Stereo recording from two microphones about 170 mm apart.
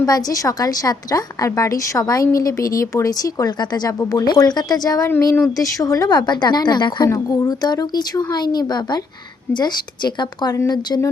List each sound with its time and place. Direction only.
0.0 s a woman's voice: 20° left (ahead or behind)